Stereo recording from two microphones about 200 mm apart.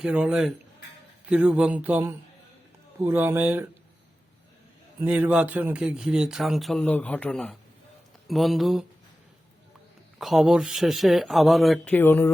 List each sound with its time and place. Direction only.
0.0 s speech: 5° right (ahead or behind)
1.3 s a sound: 5° right (ahead or behind)
4.9 s speech: 10° right (ahead or behind)
10.2 s speech: centre (ahead or behind)